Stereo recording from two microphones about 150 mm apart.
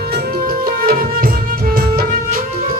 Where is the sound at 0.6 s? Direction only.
75° right (ahead or behind).